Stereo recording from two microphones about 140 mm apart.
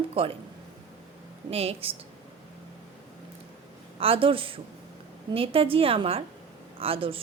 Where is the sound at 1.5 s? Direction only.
45° right (ahead or behind).